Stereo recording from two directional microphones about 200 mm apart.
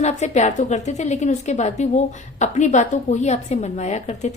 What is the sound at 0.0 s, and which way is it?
Speech, 35° left (ahead or behind).